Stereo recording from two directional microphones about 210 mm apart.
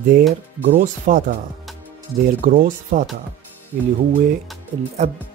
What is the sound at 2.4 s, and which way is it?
Speech, 40° right (ahead or behind).